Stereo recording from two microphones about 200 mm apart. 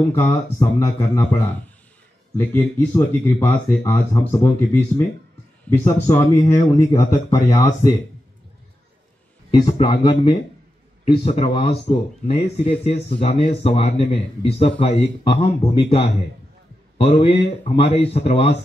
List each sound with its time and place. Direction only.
0.1 s speech: 10° left (ahead or behind)
2.3 s speech: 10° left (ahead or behind)
9.5 s speech: 25° left (ahead or behind)
17.0 s a man's voice: 30° left (ahead or behind)